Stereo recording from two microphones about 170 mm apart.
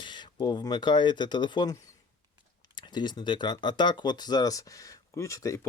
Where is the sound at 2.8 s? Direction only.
25° left (ahead or behind).